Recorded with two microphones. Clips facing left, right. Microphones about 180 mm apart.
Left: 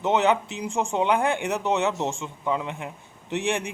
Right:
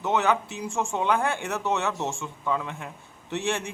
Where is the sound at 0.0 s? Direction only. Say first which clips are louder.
Left 3 dB; 20° left (ahead or behind).